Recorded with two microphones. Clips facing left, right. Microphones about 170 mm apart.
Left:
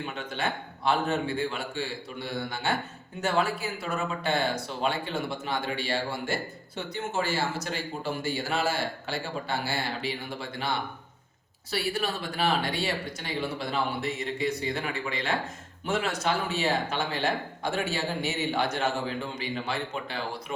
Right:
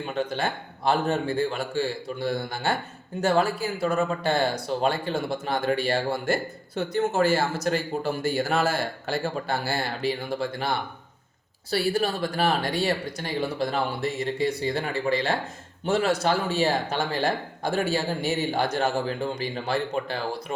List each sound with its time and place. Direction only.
0.0 s a man's voice: 40° right (ahead or behind)